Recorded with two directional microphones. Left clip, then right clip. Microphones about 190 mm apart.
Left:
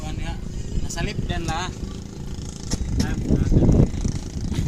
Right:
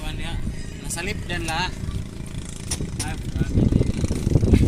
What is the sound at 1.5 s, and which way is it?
Speech, 35° left (ahead or behind).